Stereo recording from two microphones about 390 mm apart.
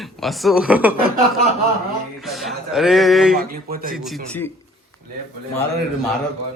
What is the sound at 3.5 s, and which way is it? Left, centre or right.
Speech, right.